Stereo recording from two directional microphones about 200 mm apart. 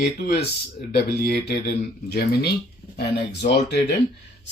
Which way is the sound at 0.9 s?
50° left (ahead or behind).